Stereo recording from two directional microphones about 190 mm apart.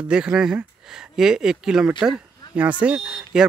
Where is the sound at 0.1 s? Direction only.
5° right (ahead or behind).